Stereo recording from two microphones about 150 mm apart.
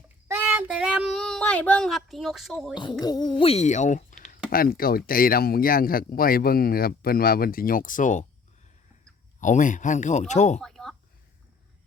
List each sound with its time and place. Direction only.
0.3 s child singing: 15° right (ahead or behind)
3.0 s music: 25° left (ahead or behind)
3.4 s speech: 45° left (ahead or behind)
9.4 s speech: 55° left (ahead or behind)
10.6 s a sound: centre (ahead or behind)